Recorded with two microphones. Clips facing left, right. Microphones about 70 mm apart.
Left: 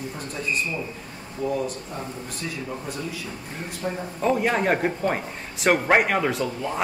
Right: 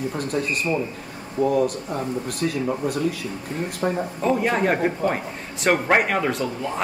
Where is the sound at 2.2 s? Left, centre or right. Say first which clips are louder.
Right 8 dB; right.